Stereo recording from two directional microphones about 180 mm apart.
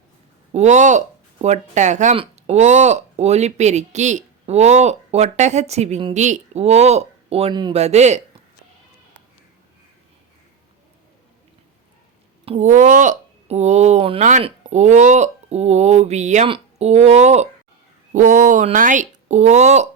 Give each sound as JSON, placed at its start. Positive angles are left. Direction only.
{"t": 0.5, "sound": "speech", "side_deg": -40}
{"t": 12.5, "sound": "speech", "side_deg": -40}